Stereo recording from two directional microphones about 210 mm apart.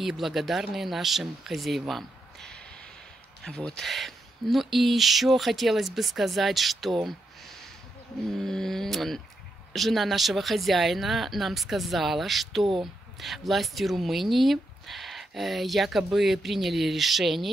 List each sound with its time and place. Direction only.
0.0 s speech: centre (ahead or behind)
8.4 s speech: centre (ahead or behind)